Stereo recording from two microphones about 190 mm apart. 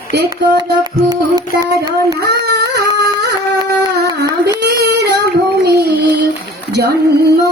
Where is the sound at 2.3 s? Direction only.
60° right (ahead or behind).